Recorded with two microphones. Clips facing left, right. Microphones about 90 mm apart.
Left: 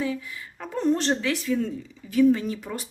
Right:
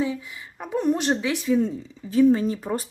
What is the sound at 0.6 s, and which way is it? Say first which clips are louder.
Speech: right 1 dB; 15° right (ahead or behind).